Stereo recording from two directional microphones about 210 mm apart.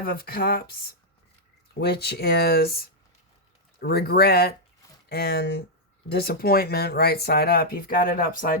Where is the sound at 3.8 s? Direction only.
50° left (ahead or behind).